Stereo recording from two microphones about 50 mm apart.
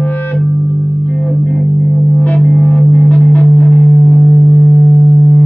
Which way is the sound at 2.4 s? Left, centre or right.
Centre.